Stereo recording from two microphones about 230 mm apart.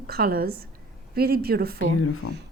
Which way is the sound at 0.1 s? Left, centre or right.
Right.